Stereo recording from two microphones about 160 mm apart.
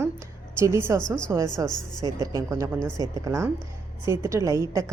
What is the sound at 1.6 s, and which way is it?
A woman's voice, 20° right (ahead or behind).